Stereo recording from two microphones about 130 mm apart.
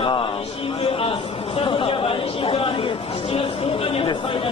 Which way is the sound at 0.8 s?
50° left (ahead or behind).